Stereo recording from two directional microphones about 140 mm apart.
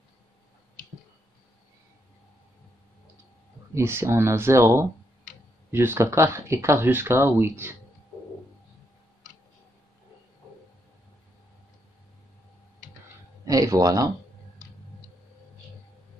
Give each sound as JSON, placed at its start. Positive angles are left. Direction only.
{"t": 3.7, "sound": "speech", "side_deg": -15}
{"t": 13.5, "sound": "speech", "side_deg": -25}